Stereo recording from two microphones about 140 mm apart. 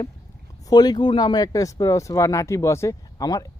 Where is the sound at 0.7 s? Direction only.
30° left (ahead or behind).